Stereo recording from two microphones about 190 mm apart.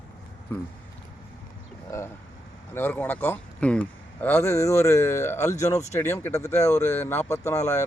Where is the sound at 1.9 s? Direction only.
15° left (ahead or behind).